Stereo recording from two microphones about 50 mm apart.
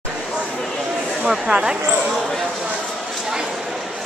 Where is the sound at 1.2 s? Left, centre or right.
Centre.